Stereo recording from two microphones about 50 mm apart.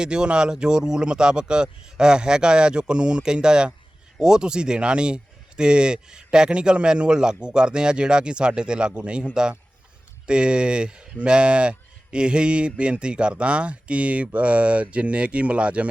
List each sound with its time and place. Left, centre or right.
0.0 s speech: centre